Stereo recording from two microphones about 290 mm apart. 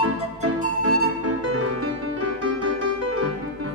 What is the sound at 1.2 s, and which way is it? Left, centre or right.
Music, right.